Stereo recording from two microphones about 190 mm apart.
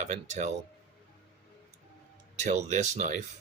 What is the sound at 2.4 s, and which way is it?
Speech, 40° right (ahead or behind).